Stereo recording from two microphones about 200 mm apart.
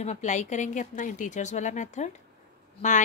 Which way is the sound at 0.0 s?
35° left (ahead or behind).